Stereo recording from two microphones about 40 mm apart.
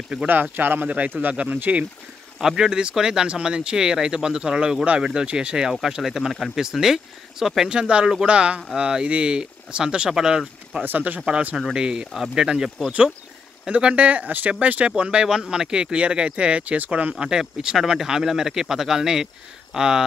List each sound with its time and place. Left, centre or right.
0.3 s speech: right
0.8 s speech: right
2.4 s speech: centre
5.7 s speech: centre
7.7 s speech: right
10.8 s speech: right
11.1 s speech: right; by 12.9 s centre
13.7 s speech: right
15.3 s speech: centre
15.7 s speech: right
17.2 s speech: centre